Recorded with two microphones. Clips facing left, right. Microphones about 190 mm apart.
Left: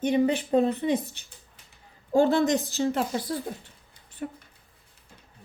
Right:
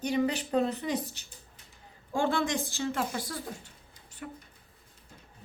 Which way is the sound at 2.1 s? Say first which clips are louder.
Left 8 dB; 40° left (ahead or behind).